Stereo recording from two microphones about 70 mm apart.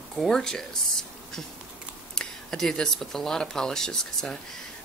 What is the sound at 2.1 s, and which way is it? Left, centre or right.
Speech, centre.